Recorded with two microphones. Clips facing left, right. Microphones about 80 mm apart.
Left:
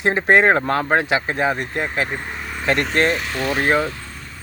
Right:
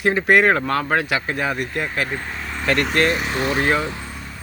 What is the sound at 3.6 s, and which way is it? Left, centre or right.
Speech, left.